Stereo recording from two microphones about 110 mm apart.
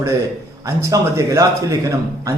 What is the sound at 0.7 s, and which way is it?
A man's voice, 25° right (ahead or behind).